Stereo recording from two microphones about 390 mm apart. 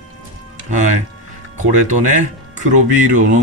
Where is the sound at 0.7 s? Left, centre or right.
Centre.